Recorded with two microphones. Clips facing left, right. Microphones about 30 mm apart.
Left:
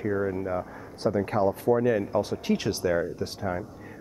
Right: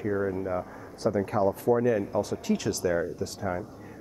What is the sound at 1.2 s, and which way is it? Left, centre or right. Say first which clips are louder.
Speech: left 1 dB; left.